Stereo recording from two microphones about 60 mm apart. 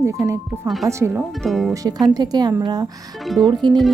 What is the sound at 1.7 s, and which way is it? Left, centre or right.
Speech, right.